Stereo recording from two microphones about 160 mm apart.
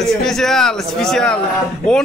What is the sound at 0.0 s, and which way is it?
A man's voice, centre (ahead or behind).